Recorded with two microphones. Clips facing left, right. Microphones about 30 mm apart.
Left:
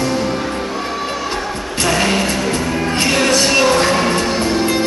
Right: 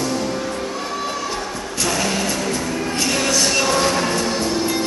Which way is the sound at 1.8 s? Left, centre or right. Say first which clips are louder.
Left 5 dB; left.